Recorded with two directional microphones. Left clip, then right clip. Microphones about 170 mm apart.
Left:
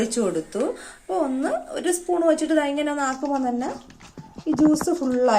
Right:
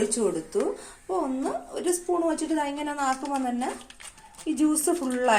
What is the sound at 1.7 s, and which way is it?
A woman's voice, 35° left (ahead or behind).